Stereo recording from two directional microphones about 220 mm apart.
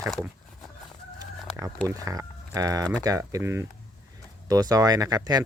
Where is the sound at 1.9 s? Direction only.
15° right (ahead or behind).